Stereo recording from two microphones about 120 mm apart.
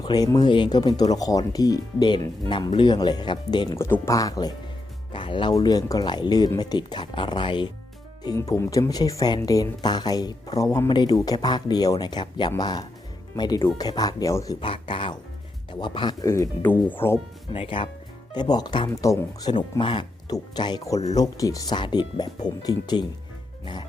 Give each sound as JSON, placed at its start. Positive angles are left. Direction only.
{"t": 0.0, "sound": "speech", "side_deg": 35}
{"t": 3.8, "sound": "speech", "side_deg": 20}
{"t": 8.4, "sound": "speech", "side_deg": 20}
{"t": 14.6, "sound": "speech", "side_deg": 45}
{"t": 16.2, "sound": "speech", "side_deg": 25}
{"t": 17.5, "sound": "speech", "side_deg": 50}
{"t": 18.3, "sound": "speech", "side_deg": 35}
{"t": 18.9, "sound": "speech", "side_deg": 30}